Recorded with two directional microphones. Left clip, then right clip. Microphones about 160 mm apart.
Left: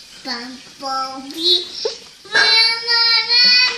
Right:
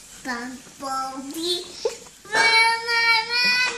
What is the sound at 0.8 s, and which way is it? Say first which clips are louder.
Child singing: left 5 dB; 10° right (ahead or behind).